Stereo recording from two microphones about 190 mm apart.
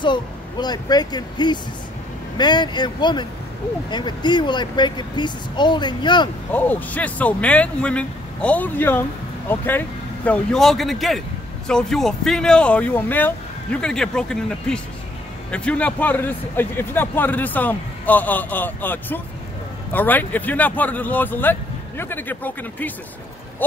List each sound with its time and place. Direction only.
0.0 s speech: 25° left (ahead or behind)
6.5 s speech: 10° left (ahead or behind)